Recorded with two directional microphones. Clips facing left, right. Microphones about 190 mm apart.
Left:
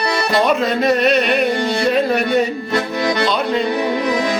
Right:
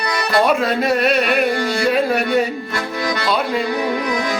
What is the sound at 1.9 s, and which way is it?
Music, 5° right (ahead or behind).